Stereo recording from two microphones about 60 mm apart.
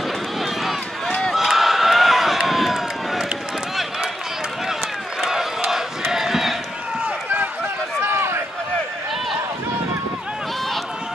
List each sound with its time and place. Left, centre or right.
1.3 s run: centre
5.2 s crowd: centre
6.0 s run: centre
8.0 s run: right